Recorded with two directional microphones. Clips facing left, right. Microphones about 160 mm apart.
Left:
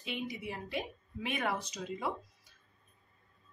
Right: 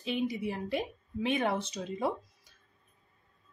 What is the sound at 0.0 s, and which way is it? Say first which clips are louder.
A woman's voice: right 7 dB; 35° right (ahead or behind).